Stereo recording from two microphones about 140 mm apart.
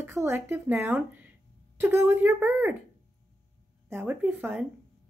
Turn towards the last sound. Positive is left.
turn(degrees=-10)  # may be behind; listen again after turning